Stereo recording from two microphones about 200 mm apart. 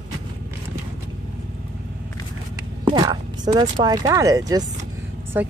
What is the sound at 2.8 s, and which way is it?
Speech, 20° right (ahead or behind).